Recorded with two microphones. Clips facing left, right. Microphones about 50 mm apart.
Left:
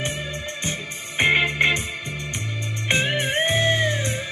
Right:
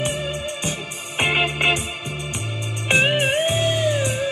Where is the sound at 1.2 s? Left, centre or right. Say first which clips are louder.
Left 1 dB; left.